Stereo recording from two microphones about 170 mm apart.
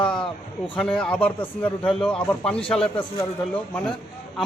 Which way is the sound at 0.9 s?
5° left (ahead or behind).